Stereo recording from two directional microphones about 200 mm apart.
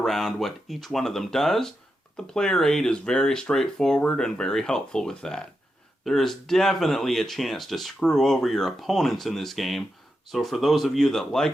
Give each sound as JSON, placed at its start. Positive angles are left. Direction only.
{"t": 0.0, "sound": "speech", "side_deg": 0}